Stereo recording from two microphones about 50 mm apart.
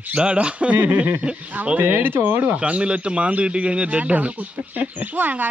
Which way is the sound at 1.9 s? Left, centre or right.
Right.